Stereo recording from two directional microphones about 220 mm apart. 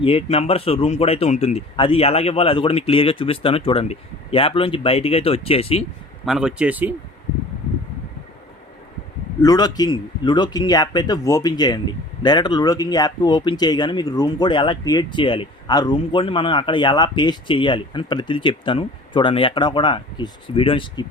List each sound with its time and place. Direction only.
0.0 s a man's voice: 25° left (ahead or behind)
6.2 s speech: centre (ahead or behind)
9.4 s a man's voice: 15° left (ahead or behind)